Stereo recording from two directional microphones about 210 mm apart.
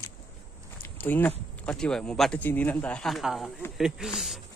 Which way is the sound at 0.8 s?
10° left (ahead or behind).